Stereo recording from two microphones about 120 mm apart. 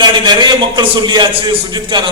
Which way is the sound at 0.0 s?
40° right (ahead or behind).